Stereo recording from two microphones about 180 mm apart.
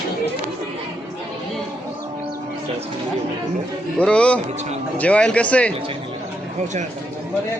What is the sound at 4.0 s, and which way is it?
Speech, 5° left (ahead or behind).